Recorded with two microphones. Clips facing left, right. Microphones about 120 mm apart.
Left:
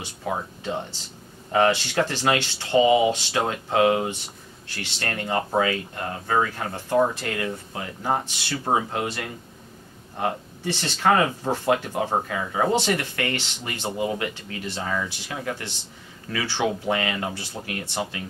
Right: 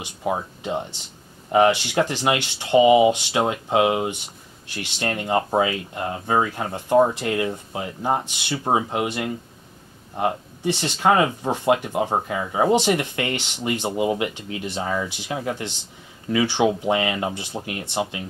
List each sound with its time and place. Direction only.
0.0 s speech: 20° right (ahead or behind)